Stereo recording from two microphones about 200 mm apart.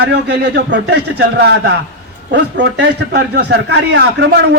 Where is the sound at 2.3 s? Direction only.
60° right (ahead or behind).